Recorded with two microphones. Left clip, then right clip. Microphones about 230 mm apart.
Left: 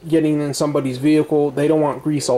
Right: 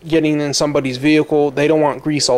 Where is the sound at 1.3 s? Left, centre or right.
Left.